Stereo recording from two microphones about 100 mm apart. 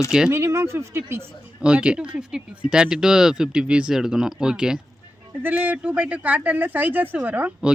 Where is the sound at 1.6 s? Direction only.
10° right (ahead or behind).